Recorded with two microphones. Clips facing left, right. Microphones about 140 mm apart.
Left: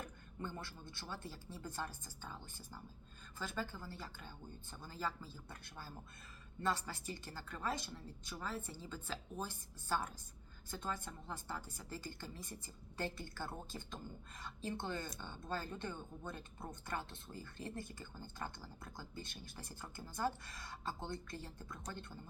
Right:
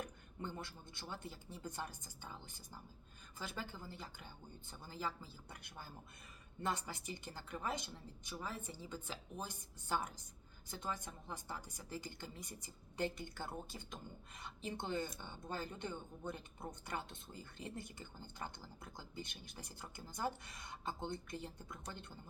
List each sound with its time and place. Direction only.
0.0 s speech: 15° right (ahead or behind)